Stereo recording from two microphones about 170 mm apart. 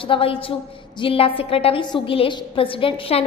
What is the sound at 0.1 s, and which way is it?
A woman's voice, 35° left (ahead or behind).